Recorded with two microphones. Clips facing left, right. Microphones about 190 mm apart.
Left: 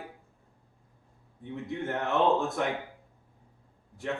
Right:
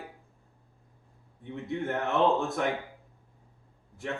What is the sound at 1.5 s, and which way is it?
A man's voice, centre (ahead or behind).